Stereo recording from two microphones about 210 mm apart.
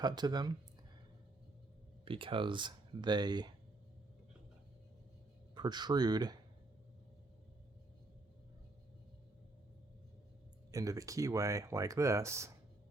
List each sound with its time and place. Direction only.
0.0 s speech: 20° right (ahead or behind)
2.0 s speech: 25° right (ahead or behind)
5.5 s speech: 20° right (ahead or behind)
10.7 s speech: 15° right (ahead or behind)